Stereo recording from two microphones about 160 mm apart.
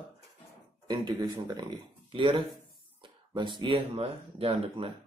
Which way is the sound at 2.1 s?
30° right (ahead or behind).